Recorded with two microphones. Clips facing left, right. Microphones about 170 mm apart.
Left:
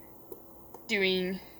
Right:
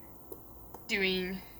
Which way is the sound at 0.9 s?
25° left (ahead or behind).